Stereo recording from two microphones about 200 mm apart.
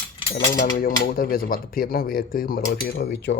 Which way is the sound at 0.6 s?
45° left (ahead or behind).